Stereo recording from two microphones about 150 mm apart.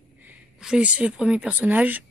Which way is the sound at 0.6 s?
5° right (ahead or behind).